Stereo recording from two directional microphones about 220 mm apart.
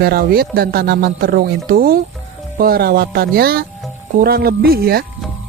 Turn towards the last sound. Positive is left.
turn(degrees=-45)  # may be behind; listen again after turning